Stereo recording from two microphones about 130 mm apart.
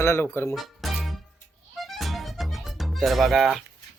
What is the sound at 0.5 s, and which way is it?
Music, centre (ahead or behind).